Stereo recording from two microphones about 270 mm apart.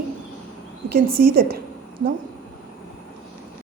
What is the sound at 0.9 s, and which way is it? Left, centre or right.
Speech, right.